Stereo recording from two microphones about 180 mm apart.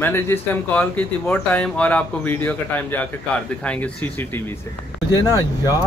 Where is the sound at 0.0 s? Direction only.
10° left (ahead or behind).